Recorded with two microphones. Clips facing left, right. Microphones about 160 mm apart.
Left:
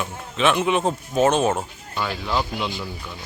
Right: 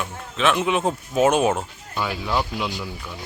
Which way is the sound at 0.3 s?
Centre (ahead or behind).